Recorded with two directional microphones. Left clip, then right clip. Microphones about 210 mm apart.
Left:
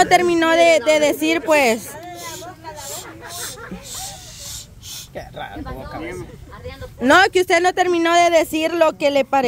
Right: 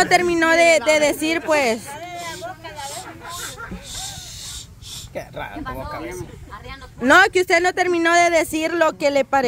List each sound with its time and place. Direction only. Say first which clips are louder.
0.0 s a woman's voice: left 2 dB; 10° left (ahead or behind)
2.0 s hubbub: right 2 dB; 35° right (ahead or behind)
7.0 s a woman's voice: even; 10° left (ahead or behind)